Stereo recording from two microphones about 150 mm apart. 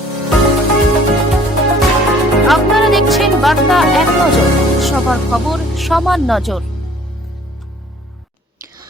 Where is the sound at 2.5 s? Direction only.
Centre (ahead or behind).